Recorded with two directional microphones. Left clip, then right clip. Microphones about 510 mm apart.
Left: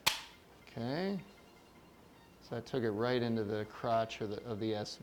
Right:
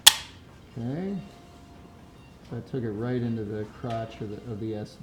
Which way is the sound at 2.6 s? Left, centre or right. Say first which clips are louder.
Right 2 dB; centre.